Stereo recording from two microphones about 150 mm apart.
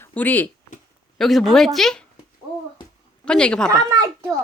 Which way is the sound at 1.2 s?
Centre (ahead or behind).